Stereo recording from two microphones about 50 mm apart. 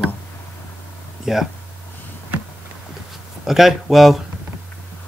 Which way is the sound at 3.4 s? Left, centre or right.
Centre.